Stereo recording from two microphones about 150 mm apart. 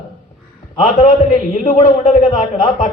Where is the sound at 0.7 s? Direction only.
60° left (ahead or behind).